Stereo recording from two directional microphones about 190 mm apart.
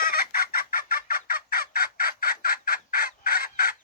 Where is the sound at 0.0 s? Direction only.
50° left (ahead or behind).